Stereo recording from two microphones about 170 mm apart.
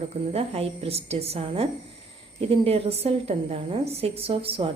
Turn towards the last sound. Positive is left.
turn(degrees=-35)  # may be behind; listen again after turning